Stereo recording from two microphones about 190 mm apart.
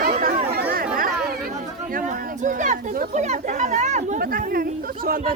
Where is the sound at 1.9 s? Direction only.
40° right (ahead or behind).